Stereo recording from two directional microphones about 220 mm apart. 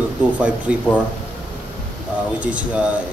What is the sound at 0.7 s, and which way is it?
Speech, 5° right (ahead or behind).